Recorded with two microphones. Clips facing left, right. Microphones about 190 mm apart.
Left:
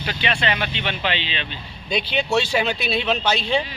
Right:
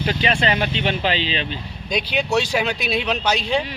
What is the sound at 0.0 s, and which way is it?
Speech, 40° right (ahead or behind).